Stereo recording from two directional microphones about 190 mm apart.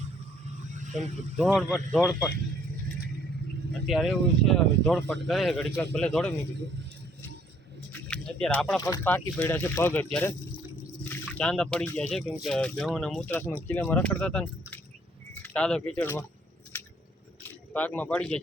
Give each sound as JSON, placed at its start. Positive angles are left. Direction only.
{"t": 0.7, "sound": "a sound", "side_deg": -40}
{"t": 0.9, "sound": "speech", "side_deg": 0}
{"t": 2.0, "sound": "speech", "side_deg": 15}
{"t": 3.8, "sound": "speech", "side_deg": 0}
{"t": 7.9, "sound": "speech", "side_deg": 5}
{"t": 17.4, "sound": "speech", "side_deg": 10}